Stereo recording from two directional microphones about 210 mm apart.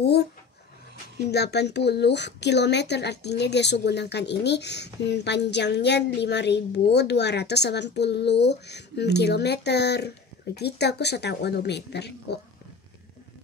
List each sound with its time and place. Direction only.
0.0 s speech: 50° left (ahead or behind)
1.3 s speech: 50° left (ahead or behind)